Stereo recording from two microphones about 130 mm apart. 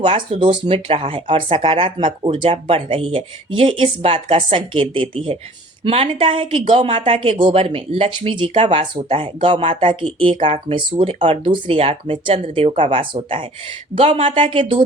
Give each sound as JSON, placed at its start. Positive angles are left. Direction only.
{"t": 0.0, "sound": "speech", "side_deg": -45}